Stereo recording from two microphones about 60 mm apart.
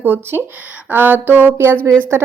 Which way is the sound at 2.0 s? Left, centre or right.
Right.